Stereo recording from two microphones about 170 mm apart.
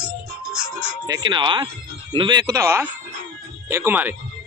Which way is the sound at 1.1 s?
25° right (ahead or behind).